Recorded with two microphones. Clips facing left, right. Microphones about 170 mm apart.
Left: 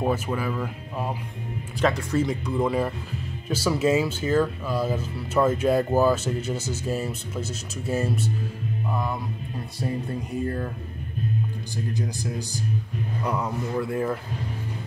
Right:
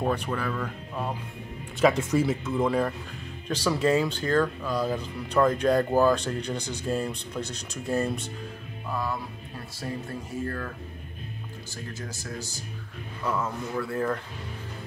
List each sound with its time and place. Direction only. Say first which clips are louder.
0.0 s speech: left 2 dB; 10° left (ahead or behind)
1.8 s speech: right 1 dB; 5° right (ahead or behind)
9.8 s music: left 5 dB; 20° left (ahead or behind)
12.0 s speech: left 6 dB; 20° left (ahead or behind)